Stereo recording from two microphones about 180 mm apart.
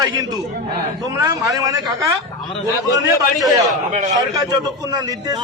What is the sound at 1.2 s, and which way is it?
Speech, 20° right (ahead or behind).